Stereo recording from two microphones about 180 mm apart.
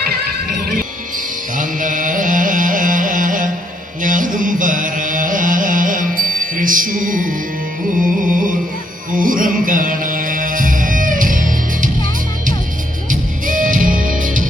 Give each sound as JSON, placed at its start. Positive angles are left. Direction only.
{"t": 0.6, "sound": "music", "side_deg": -50}
{"t": 13.1, "sound": "music", "side_deg": -50}